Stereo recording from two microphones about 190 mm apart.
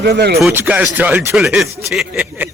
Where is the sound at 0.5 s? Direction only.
10° right (ahead or behind).